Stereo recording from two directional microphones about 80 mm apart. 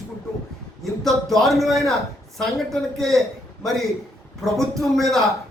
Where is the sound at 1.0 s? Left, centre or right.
Centre.